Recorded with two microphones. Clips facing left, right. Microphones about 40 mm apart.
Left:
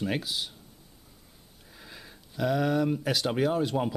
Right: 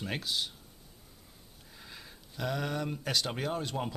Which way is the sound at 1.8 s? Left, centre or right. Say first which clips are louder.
Left 2 dB; centre.